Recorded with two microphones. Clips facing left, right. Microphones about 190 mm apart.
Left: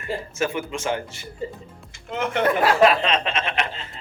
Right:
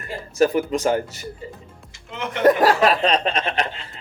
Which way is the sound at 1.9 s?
50° left (ahead or behind).